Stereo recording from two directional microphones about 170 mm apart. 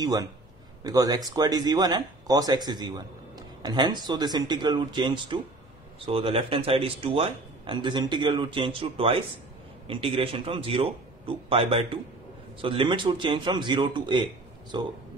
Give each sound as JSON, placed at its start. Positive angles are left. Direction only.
{"t": 0.0, "sound": "a man's voice", "side_deg": -20}